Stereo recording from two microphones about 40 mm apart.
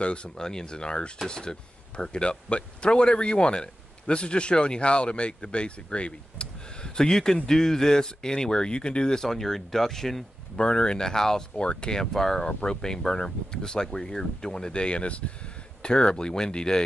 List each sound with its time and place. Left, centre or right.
0.0 s speech: left
0.4 s speech: centre
10.5 s speech: left
12.0 s speech: centre